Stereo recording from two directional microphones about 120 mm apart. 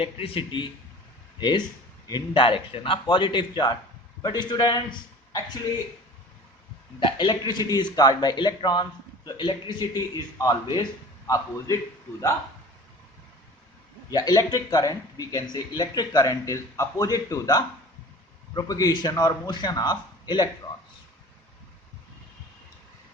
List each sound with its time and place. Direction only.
0.0 s a man's voice: 50° left (ahead or behind)
7.0 s a man's voice: 40° left (ahead or behind)
14.1 s speech: 35° left (ahead or behind)